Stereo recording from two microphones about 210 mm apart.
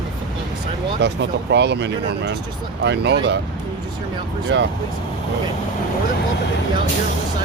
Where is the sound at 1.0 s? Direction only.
55° right (ahead or behind).